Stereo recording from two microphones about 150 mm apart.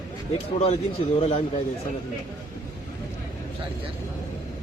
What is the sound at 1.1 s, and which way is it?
Speech, 40° left (ahead or behind).